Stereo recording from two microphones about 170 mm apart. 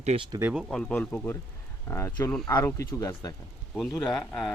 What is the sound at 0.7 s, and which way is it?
Speech, 5° left (ahead or behind).